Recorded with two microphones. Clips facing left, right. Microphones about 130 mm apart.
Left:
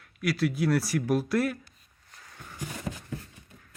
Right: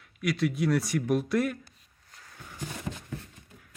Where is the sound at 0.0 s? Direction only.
Centre (ahead or behind).